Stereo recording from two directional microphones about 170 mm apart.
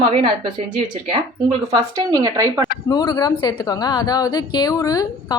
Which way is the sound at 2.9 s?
25° left (ahead or behind).